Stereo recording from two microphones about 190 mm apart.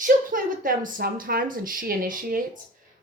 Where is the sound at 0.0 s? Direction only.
45° right (ahead or behind).